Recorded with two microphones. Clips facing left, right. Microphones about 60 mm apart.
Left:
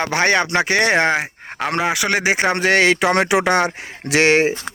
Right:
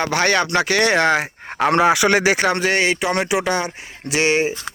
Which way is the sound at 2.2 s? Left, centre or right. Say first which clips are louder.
Right 1 dB; centre.